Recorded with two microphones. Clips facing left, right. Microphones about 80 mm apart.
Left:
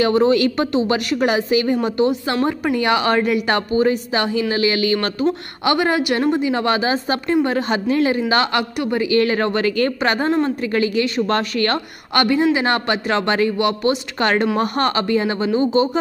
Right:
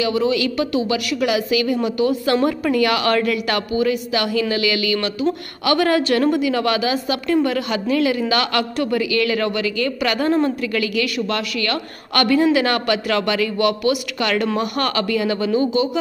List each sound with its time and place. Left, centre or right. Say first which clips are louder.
0.0 s a man's voice: left 4 dB; left
2.4 s a woman's voice: right 1 dB; left
5.2 s a woman's voice: left 2 dB; left
12.1 s a woman's voice: even; left